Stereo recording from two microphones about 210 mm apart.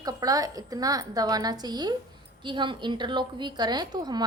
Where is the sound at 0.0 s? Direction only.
15° right (ahead or behind).